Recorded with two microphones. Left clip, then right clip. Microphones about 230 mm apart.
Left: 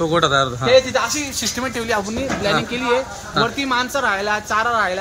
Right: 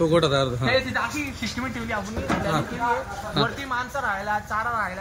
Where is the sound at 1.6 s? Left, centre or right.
Left.